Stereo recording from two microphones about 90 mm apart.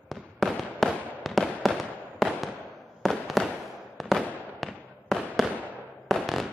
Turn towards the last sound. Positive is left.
turn(degrees=0)  # may be behind; listen again after turning